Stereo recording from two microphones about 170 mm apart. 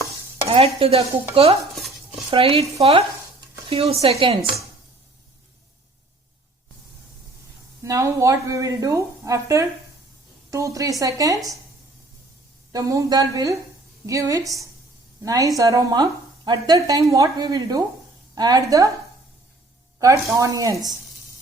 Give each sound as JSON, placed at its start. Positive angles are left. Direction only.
{"t": 0.4, "sound": "stir", "side_deg": -35}
{"t": 1.7, "sound": "dishes", "side_deg": 0}
{"t": 2.3, "sound": "stir", "side_deg": -35}
{"t": 3.7, "sound": "speech", "side_deg": -35}
{"t": 4.0, "sound": "stir", "side_deg": -35}
{"t": 7.8, "sound": "a woman's voice", "side_deg": -20}
{"t": 12.7, "sound": "a woman's voice", "side_deg": -20}
{"t": 20.0, "sound": "a woman's voice", "side_deg": -20}